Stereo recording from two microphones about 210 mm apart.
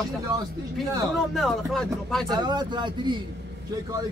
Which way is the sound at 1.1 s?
Centre (ahead or behind).